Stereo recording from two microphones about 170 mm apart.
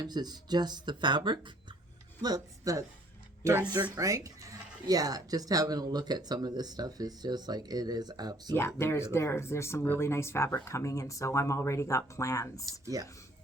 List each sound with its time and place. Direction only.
0.0 s speech: 25° right (ahead or behind)
8.5 s speech: 15° left (ahead or behind)
12.8 s speech: 20° right (ahead or behind)